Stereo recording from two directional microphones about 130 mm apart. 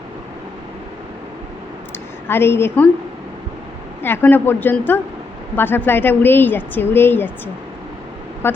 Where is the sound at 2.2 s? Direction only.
20° left (ahead or behind).